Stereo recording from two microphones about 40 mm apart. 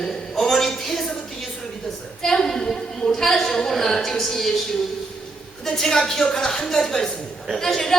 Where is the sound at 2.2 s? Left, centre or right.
Centre.